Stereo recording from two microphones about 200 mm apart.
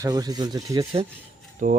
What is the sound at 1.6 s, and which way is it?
Speech, 40° right (ahead or behind).